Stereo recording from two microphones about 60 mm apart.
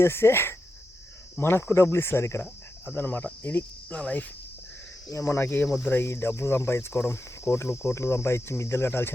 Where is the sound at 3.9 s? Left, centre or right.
Left.